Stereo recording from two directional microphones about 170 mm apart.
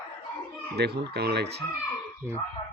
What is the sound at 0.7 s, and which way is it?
Speech, 70° right (ahead or behind).